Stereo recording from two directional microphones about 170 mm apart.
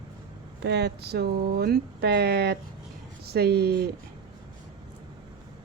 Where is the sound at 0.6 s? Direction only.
75° right (ahead or behind).